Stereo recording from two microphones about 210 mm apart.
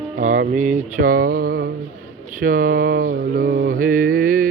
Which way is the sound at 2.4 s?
40° right (ahead or behind).